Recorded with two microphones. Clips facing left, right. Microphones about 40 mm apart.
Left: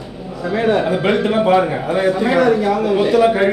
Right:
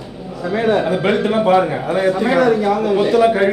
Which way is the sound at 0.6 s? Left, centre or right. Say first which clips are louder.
Even; centre.